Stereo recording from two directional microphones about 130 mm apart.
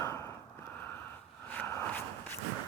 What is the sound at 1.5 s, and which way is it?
Walk, 15° left (ahead or behind).